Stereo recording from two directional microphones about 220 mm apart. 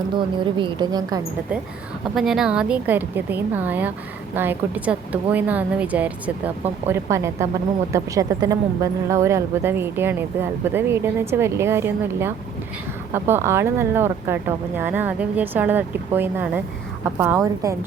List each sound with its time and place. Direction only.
0.2 s a woman's voice: 20° right (ahead or behind)
2.1 s a woman's voice: centre (ahead or behind)